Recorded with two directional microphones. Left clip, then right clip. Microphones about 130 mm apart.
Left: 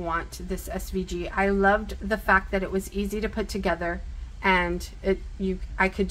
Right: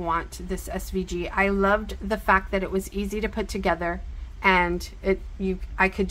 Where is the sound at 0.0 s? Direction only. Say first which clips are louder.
Right 3 dB; 25° right (ahead or behind).